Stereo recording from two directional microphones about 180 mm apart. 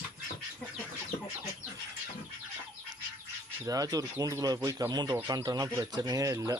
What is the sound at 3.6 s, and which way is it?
Speech, 20° right (ahead or behind).